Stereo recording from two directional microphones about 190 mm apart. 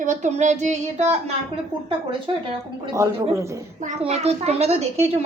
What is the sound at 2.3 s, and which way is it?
Speech, 30° right (ahead or behind).